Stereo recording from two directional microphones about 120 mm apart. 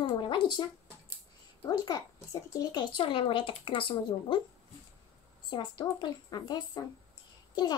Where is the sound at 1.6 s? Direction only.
35° left (ahead or behind).